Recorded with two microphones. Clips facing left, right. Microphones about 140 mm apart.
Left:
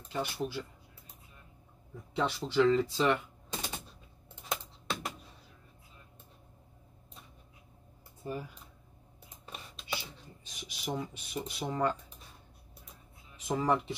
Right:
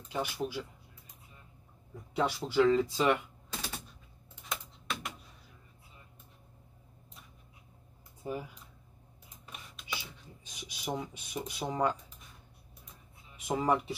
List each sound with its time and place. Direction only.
0.1 s speech: 15° right (ahead or behind)
2.1 s speech: 10° right (ahead or behind)
3.4 s a sound: 20° left (ahead or behind)
4.5 s typing: 30° left (ahead or behind)
8.2 s speech: 15° right (ahead or behind)
9.5 s a sound: 30° left (ahead or behind)
10.4 s speech: 15° right (ahead or behind)
13.5 s speech: 15° right (ahead or behind)